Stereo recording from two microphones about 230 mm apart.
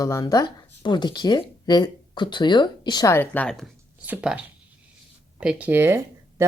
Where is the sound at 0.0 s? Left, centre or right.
Centre.